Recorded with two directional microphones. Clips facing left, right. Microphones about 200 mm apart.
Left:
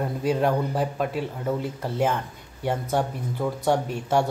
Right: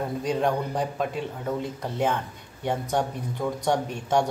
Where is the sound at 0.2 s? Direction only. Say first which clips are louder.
Left 3 dB; 5° left (ahead or behind).